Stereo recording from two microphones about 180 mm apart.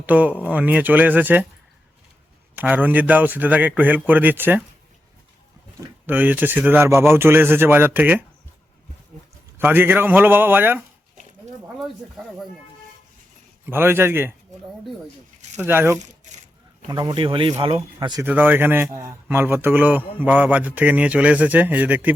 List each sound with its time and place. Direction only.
0.0 s a man's voice: 10° right (ahead or behind)
2.6 s a man's voice: 10° right (ahead or behind)
6.1 s a man's voice: 10° right (ahead or behind)
9.6 s a man's voice: 10° right (ahead or behind)
12.1 s speech: centre (ahead or behind)
13.7 s a man's voice: 10° right (ahead or behind)
15.6 s a man's voice: 10° right (ahead or behind)
16.0 s a sound: 40° right (ahead or behind)
16.9 s speech: 25° right (ahead or behind)
18.2 s a man's voice: 10° right (ahead or behind)